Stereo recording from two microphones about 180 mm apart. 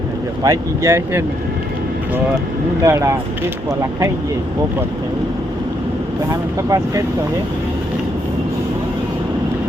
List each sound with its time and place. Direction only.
0.4 s speech: 15° right (ahead or behind)
2.8 s speech: 15° right (ahead or behind)
6.6 s speech: 20° right (ahead or behind)